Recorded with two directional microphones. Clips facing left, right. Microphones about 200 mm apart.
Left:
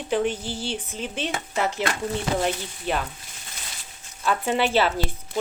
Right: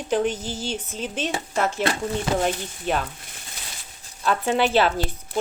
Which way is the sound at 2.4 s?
50° right (ahead or behind).